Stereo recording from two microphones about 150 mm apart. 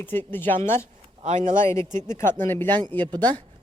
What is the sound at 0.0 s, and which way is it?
Speech, 15° left (ahead or behind).